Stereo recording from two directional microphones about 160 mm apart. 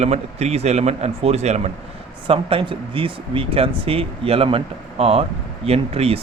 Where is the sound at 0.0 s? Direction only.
45° right (ahead or behind).